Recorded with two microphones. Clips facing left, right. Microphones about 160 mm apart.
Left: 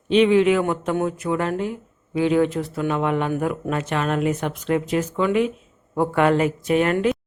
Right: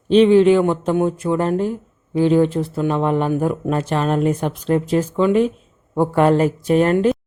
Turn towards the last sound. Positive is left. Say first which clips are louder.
# right 4 dB
turn(degrees=-35)  # may be behind; listen again after turning